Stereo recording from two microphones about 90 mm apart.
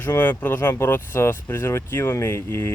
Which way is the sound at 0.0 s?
20° left (ahead or behind).